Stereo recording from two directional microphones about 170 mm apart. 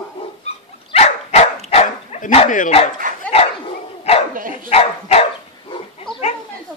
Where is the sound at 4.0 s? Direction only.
35° left (ahead or behind).